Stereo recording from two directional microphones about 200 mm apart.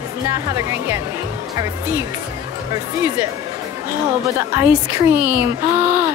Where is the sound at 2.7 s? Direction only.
15° right (ahead or behind).